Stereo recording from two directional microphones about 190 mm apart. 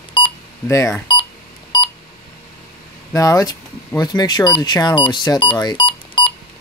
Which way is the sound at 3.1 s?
15° left (ahead or behind).